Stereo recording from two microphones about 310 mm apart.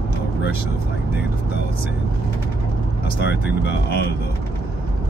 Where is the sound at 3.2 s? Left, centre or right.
Left.